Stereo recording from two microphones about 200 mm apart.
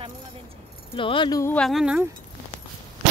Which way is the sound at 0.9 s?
25° left (ahead or behind).